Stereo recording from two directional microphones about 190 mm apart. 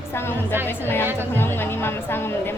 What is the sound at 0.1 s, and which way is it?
A woman's voice, 10° left (ahead or behind).